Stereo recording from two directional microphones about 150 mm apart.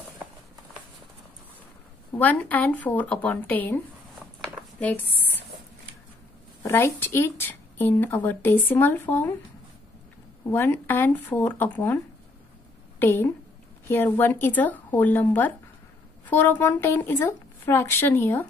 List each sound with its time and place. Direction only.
2.1 s speech: 10° left (ahead or behind)
6.6 s speech: 15° left (ahead or behind)
10.5 s speech: 15° left (ahead or behind)
13.0 s speech: 15° left (ahead or behind)